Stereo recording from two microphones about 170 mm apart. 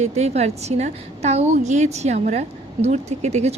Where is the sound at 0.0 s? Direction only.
40° right (ahead or behind).